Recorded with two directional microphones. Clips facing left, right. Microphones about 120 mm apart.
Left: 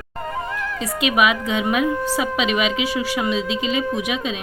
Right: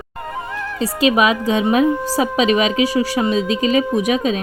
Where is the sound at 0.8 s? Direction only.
35° right (ahead or behind).